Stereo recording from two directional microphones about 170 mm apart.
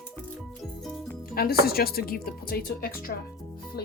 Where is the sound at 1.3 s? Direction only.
65° left (ahead or behind).